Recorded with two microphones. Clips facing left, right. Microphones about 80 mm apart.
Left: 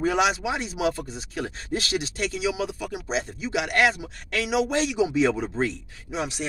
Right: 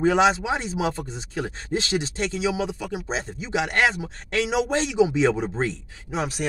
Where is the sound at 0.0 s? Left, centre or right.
Right.